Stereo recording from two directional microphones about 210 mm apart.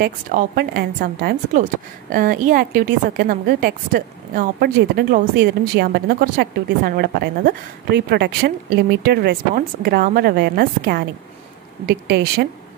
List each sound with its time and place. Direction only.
0.0 s a woman's voice: 45° right (ahead or behind)